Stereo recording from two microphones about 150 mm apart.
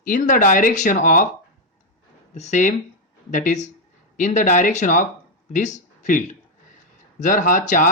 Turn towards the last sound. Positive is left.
turn(degrees=60)  # may be behind; listen again after turning